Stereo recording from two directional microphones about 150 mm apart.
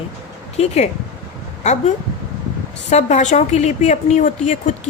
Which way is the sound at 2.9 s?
50° left (ahead or behind).